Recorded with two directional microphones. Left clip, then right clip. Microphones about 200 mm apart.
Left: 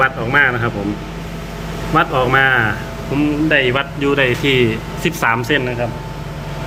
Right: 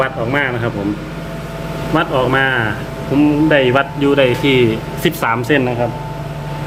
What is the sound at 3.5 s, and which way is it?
Speech, 15° right (ahead or behind).